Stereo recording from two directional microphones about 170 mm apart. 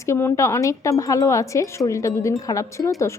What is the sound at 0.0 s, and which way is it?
A woman's voice, 15° left (ahead or behind).